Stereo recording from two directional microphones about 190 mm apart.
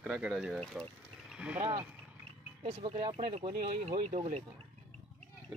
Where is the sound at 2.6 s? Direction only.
35° right (ahead or behind).